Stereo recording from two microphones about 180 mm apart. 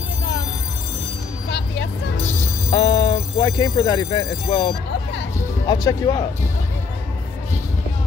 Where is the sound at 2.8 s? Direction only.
20° left (ahead or behind).